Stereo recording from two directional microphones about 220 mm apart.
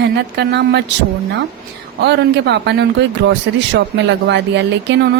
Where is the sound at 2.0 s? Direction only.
50° right (ahead or behind).